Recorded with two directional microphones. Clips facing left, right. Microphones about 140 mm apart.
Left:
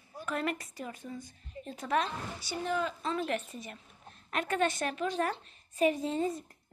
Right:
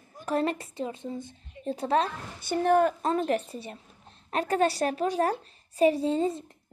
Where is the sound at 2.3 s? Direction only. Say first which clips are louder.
Right 12 dB; 55° right (ahead or behind); by 6.4 s 30° right (ahead or behind).